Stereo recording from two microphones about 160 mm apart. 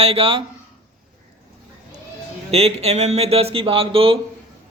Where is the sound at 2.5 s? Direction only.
40° right (ahead or behind).